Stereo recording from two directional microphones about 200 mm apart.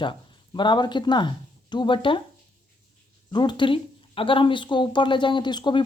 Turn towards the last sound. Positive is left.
turn(degrees=25)  # may be behind; listen again after turning